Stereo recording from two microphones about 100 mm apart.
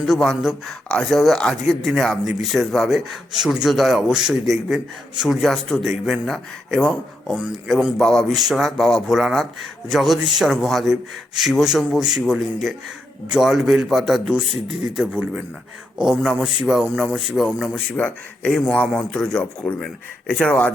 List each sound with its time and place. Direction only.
0.0 s a man's voice: centre (ahead or behind)
7.7 s speech: 5° right (ahead or behind)
7.9 s a man's voice: 5° left (ahead or behind)
17.9 s speech: 15° left (ahead or behind)